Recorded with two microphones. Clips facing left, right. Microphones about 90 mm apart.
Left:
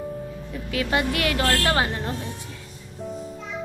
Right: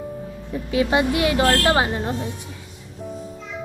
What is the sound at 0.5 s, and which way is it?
Speech, 25° right (ahead or behind).